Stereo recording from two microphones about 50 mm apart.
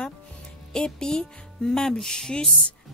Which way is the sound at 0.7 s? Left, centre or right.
Centre.